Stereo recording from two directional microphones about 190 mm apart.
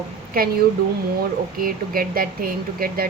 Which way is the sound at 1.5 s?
50° right (ahead or behind).